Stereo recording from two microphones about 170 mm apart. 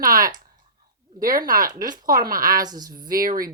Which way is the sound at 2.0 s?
55° right (ahead or behind).